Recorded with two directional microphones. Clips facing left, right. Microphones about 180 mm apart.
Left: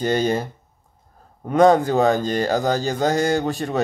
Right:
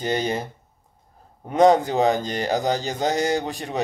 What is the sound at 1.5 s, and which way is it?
Speech, 20° right (ahead or behind).